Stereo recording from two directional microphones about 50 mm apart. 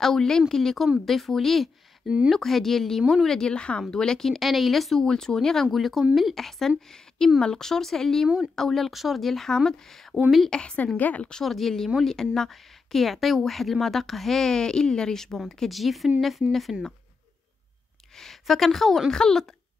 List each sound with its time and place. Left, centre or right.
0.0 s a woman's voice: centre
2.0 s speech: right
2.3 s a woman's voice: centre
4.4 s a woman's voice: centre
5.0 s a woman's voice: centre
10.5 s a woman's voice: centre
11.0 s a woman's voice: left
11.4 s a woman's voice: centre
18.1 s speech: centre